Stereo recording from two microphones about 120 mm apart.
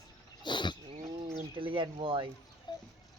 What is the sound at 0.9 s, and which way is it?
Bird, 50° right (ahead or behind).